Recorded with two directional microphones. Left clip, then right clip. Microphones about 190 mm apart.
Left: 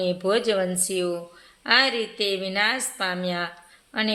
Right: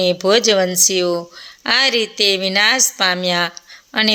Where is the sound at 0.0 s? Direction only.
40° right (ahead or behind).